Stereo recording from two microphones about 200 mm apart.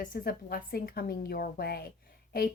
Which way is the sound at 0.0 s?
45° left (ahead or behind).